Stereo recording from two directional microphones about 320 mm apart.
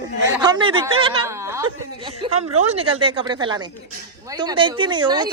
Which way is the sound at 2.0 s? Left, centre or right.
Centre.